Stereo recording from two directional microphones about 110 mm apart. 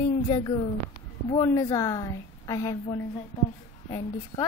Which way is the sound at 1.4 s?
35° left (ahead or behind).